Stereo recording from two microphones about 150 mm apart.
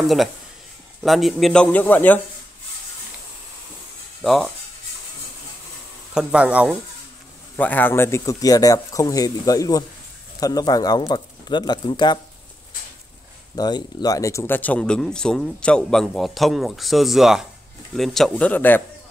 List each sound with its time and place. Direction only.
1.0 s speech: centre (ahead or behind)
4.2 s speech: centre (ahead or behind)
6.1 s speech: 10° right (ahead or behind)
7.5 s speech: 10° left (ahead or behind); by 12.2 s 30° left (ahead or behind)
13.6 s speech: 30° left (ahead or behind); by 18.8 s 10° left (ahead or behind)